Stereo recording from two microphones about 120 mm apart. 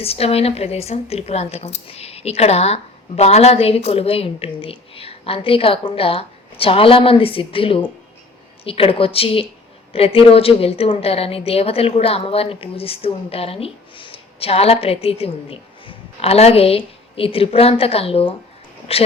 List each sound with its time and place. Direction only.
0.0 s a woman's voice: 55° left (ahead or behind)